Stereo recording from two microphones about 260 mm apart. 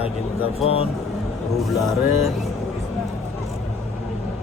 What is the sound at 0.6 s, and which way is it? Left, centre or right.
Speech, left.